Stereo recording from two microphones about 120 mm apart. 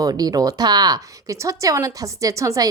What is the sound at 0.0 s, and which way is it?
Speech, 30° right (ahead or behind).